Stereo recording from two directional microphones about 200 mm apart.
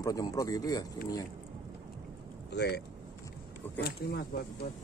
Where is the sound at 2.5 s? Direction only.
55° left (ahead or behind).